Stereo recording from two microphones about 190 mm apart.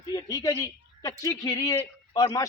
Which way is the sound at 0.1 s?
20° left (ahead or behind).